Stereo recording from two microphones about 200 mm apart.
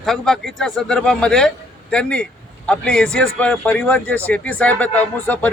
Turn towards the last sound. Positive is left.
turn(degrees=10)  # may be behind; listen again after turning